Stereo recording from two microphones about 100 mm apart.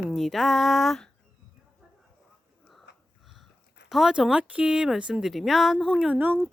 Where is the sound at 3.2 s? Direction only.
Centre (ahead or behind).